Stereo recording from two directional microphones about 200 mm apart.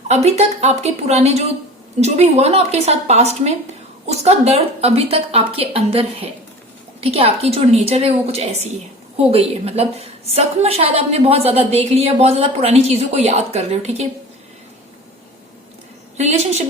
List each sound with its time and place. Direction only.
0.1 s a woman's voice: 30° right (ahead or behind)
16.1 s a woman's voice: 35° right (ahead or behind)